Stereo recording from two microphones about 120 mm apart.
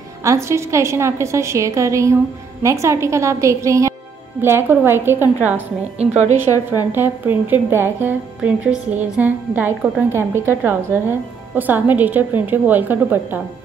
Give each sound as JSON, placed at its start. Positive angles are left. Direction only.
{"t": 0.2, "sound": "a woman's voice", "side_deg": -25}
{"t": 5.9, "sound": "a woman's voice", "side_deg": -65}
{"t": 6.5, "sound": "a woman's voice", "side_deg": 30}
{"t": 6.9, "sound": "a woman's voice", "side_deg": -15}